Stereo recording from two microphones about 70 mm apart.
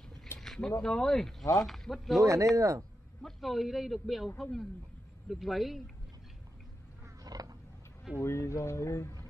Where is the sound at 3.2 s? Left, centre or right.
Centre.